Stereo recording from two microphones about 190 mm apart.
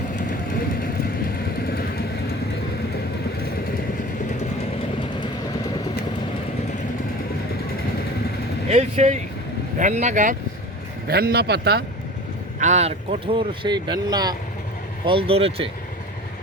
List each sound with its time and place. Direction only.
1.6 s vehicle: 50° left (ahead or behind)
8.7 s speech: 35° right (ahead or behind)
11.1 s speech: 55° right (ahead or behind)
12.5 s speech: 40° right (ahead or behind)